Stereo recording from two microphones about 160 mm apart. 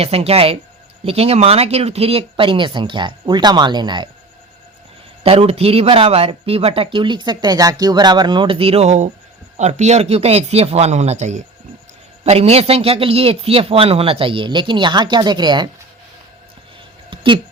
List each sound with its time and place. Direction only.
0.0 s speech: 40° right (ahead or behind)
5.2 s speech: 40° right (ahead or behind)
17.1 s a sound: 30° right (ahead or behind)